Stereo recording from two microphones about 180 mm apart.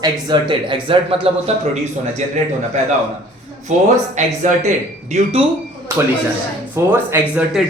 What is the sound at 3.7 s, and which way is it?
Speech, 40° right (ahead or behind).